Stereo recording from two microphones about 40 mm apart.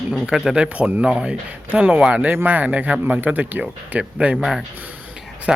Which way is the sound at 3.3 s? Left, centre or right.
Right.